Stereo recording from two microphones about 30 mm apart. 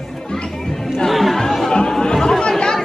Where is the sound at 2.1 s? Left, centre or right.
Centre.